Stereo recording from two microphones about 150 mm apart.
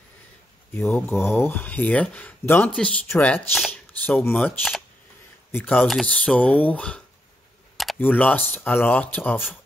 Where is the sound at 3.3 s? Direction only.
Centre (ahead or behind).